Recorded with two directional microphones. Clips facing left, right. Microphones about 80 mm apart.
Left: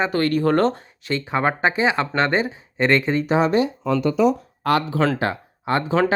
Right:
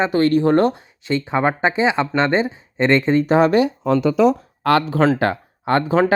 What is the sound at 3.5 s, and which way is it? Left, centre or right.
Speech, right.